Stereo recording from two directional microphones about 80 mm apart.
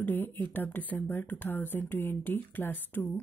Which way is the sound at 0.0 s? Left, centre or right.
Left.